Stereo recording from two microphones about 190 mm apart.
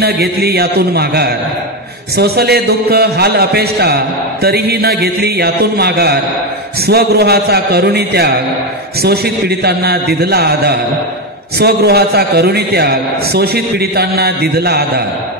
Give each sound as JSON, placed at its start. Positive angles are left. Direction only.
{"t": 0.0, "sound": "a man's voice", "side_deg": -55}